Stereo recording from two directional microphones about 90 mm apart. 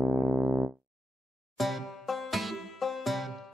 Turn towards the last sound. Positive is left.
turn(degrees=0)  # may be behind; listen again after turning